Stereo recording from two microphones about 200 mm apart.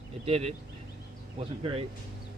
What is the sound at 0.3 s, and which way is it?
Speech, 30° right (ahead or behind).